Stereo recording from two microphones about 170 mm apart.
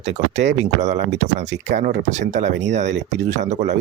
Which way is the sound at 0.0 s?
40° right (ahead or behind).